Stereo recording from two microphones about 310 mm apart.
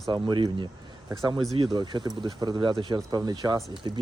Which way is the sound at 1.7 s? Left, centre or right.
Centre.